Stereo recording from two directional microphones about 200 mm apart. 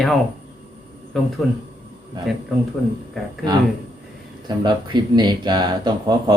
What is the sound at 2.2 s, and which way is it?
Speech, 20° right (ahead or behind).